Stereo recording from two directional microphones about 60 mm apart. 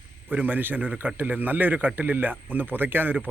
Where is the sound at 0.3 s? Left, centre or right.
Right.